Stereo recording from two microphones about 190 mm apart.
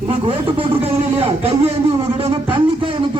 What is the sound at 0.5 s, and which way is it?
Speech, 30° right (ahead or behind).